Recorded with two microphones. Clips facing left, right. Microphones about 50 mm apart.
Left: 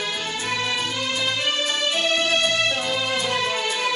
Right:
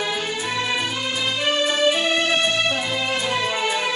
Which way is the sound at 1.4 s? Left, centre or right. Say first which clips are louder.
Right 4 dB; centre.